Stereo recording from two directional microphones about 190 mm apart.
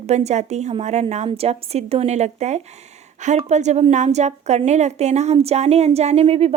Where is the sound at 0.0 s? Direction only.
35° right (ahead or behind).